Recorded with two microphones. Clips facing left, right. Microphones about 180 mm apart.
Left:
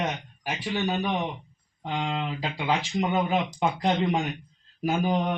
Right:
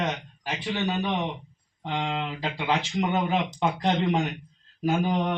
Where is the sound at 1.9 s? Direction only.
10° left (ahead or behind).